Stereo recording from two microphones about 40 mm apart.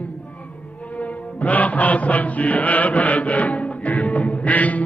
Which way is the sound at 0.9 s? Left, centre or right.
Left.